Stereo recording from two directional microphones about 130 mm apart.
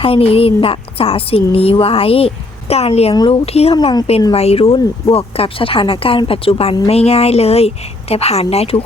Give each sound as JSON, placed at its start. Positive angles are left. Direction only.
{"t": 0.0, "sound": "speech", "side_deg": 45}
{"t": 3.2, "sound": "speech", "side_deg": 40}